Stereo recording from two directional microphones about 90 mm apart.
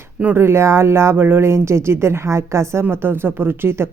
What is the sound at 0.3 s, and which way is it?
Speech, 30° right (ahead or behind).